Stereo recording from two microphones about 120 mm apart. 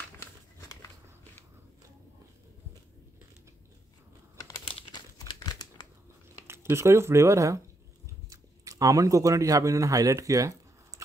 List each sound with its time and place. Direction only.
4.4 s crumpling: 30° left (ahead or behind)
4.6 s crumpling: 50° left (ahead or behind)
5.3 s crumpling: 30° left (ahead or behind)
6.4 s speech: 20° right (ahead or behind)